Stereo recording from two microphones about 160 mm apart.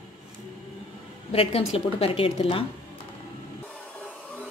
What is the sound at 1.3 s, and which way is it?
A woman's voice, 35° left (ahead or behind).